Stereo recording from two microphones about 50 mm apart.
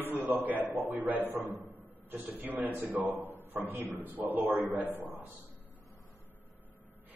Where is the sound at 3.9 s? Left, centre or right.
Right.